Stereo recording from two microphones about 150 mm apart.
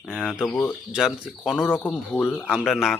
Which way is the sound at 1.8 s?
15° left (ahead or behind).